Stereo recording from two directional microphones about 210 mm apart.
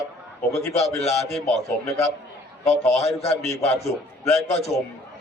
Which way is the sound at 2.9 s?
30° left (ahead or behind).